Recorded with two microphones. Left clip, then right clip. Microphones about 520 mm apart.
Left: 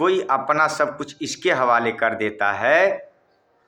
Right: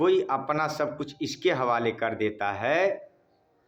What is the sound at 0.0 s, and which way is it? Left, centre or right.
A man's voice, right.